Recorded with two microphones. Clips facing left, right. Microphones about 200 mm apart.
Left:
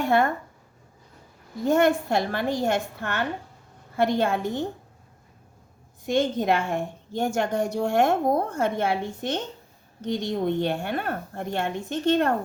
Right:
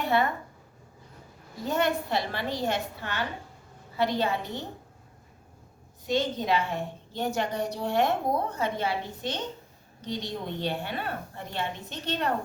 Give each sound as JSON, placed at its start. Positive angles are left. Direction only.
{"t": 0.0, "sound": "a woman's voice", "side_deg": 50}
{"t": 1.6, "sound": "a woman's voice", "side_deg": 50}
{"t": 6.1, "sound": "a woman's voice", "side_deg": 50}